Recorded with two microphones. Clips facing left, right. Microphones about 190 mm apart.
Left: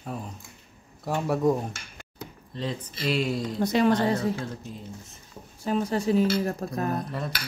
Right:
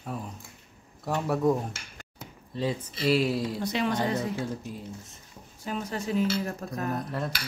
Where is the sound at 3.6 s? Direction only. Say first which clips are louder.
Left 10 dB; 45° left (ahead or behind).